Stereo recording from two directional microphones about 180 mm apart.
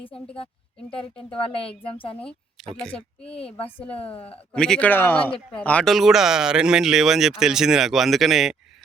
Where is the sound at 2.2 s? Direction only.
5° left (ahead or behind).